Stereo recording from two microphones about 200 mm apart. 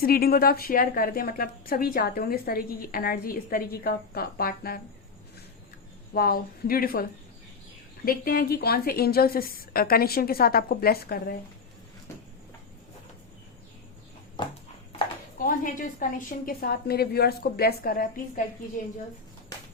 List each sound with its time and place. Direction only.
0.0 s a woman's voice: 50° left (ahead or behind)
6.1 s a woman's voice: 45° left (ahead or behind)
15.4 s a woman's voice: 40° left (ahead or behind)